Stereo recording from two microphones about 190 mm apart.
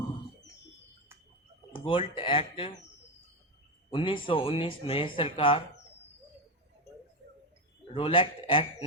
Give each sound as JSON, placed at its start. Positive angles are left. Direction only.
{"t": 1.7, "sound": "speech", "side_deg": 25}
{"t": 3.9, "sound": "speech", "side_deg": 25}
{"t": 7.9, "sound": "speech", "side_deg": 30}